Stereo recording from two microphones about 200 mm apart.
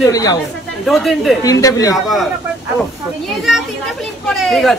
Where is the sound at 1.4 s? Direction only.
15° left (ahead or behind).